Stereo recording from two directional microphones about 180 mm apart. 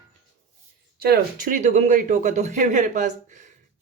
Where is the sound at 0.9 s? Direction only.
60° right (ahead or behind).